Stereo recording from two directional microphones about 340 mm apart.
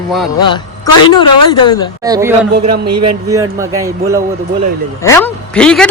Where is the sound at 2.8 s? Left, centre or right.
Right.